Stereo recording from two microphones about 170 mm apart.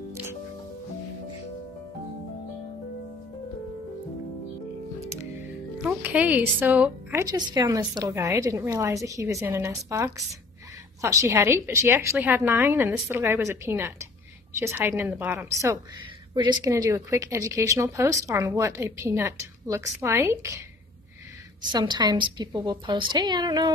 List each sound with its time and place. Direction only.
0.1 s music: 15° right (ahead or behind)
5.8 s speech: 10° right (ahead or behind)
21.7 s a woman's voice: 25° right (ahead or behind)